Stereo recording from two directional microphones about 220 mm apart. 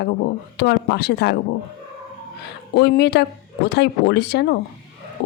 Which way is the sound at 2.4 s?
50° left (ahead or behind).